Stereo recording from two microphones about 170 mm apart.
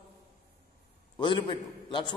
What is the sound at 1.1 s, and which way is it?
Speech, 30° left (ahead or behind).